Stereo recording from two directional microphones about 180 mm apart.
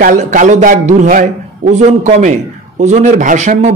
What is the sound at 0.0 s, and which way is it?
A man's voice, 45° right (ahead or behind).